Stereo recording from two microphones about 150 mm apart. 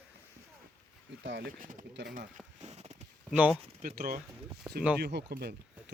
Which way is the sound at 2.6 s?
50° right (ahead or behind).